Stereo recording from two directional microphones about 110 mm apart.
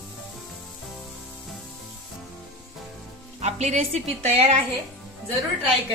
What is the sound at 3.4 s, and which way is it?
A woman's voice, 85° right.